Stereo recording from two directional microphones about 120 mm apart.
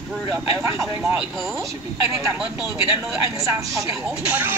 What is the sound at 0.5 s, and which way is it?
A woman's voice, 25° right (ahead or behind).